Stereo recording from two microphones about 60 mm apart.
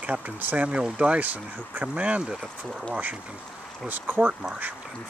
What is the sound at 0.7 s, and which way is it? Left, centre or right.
Speech, centre.